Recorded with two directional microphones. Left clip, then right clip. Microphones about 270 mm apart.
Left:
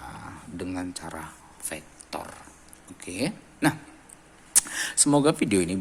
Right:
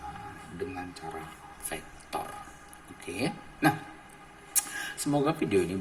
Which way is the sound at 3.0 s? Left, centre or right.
Left.